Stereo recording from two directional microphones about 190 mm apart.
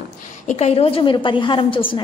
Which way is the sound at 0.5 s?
35° left (ahead or behind).